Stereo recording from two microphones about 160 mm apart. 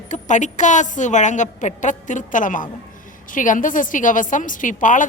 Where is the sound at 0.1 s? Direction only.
50° left (ahead or behind).